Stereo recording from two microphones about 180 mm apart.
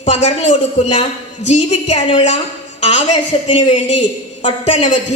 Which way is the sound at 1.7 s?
35° left (ahead or behind).